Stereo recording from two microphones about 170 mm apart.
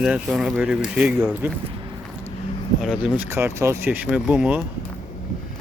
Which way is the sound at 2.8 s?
5° right (ahead or behind).